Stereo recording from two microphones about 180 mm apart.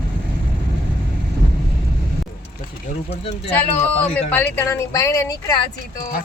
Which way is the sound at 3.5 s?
10° left (ahead or behind).